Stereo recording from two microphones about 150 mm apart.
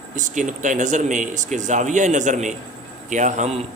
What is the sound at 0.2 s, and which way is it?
A man's voice, 55° right (ahead or behind).